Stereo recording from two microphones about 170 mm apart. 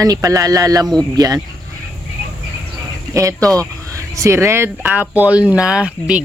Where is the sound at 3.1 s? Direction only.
20° right (ahead or behind).